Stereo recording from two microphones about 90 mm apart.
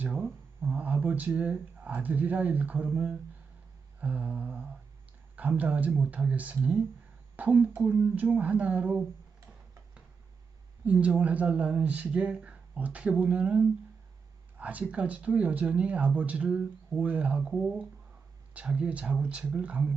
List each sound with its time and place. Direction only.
0.2 s a sound: 5° right (ahead or behind)
0.7 s speech: 20° right (ahead or behind)
10.8 s speech: 15° right (ahead or behind)